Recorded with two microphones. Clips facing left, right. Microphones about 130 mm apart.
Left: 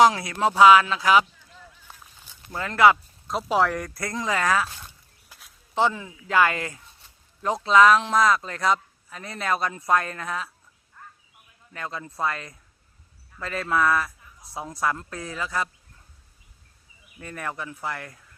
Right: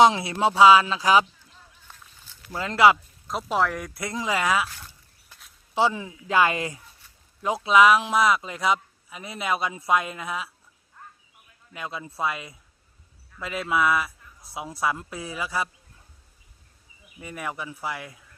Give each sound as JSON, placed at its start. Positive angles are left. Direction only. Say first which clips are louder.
{"t": 0.0, "sound": "speech", "louder": "even", "side_deg": -25}
{"t": 2.2, "sound": "a sound", "louder": "left 1 dB", "side_deg": 15}
{"t": 2.6, "sound": "speech", "louder": "even", "side_deg": -20}
{"t": 3.2, "sound": "speech", "louder": "left 2 dB", "side_deg": 0}
{"t": 5.7, "sound": "a man's voice", "louder": "even", "side_deg": -15}
{"t": 7.4, "sound": "a man's voice", "louder": "left 1 dB", "side_deg": -5}
{"t": 11.7, "sound": "a man's voice", "louder": "even", "side_deg": -10}
{"t": 17.2, "sound": "a man's voice", "louder": "even", "side_deg": -15}